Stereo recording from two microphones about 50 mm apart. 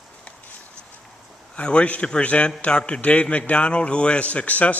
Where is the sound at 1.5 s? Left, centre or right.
Left.